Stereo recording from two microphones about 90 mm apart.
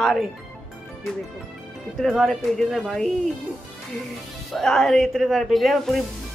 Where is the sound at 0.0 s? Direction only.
Centre (ahead or behind).